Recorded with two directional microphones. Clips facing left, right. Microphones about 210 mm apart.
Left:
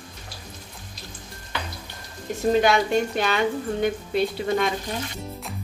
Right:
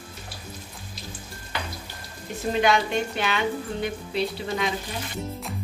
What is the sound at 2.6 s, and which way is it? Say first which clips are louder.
A woman's voice: right 2 dB; 40° left (ahead or behind).